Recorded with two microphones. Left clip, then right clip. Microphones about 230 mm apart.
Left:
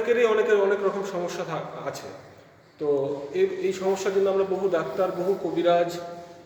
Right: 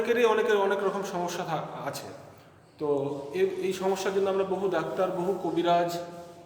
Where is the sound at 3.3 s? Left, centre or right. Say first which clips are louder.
Left 3 dB; right.